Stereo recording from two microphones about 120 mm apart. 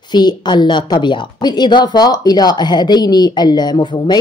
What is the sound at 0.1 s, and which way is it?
A woman's voice, 35° left (ahead or behind).